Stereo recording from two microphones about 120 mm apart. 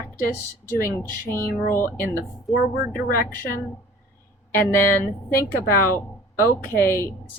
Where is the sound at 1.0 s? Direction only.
25° left (ahead or behind).